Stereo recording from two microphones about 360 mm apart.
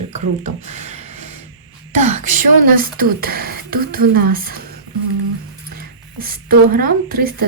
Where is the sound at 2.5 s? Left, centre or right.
Right.